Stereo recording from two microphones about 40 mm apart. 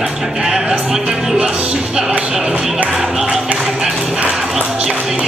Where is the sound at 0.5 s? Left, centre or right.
Right.